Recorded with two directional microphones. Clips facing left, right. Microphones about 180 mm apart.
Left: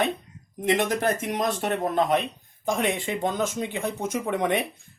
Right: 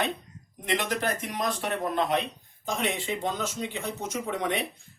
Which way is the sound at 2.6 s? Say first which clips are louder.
Left 4 dB; 50° left (ahead or behind).